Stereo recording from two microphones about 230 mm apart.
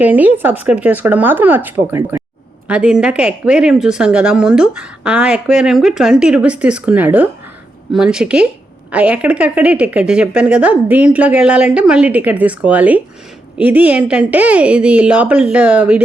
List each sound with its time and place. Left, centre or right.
0.0 s speech: centre